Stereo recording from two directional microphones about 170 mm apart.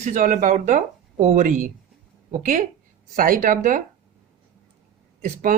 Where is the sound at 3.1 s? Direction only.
55° right (ahead or behind).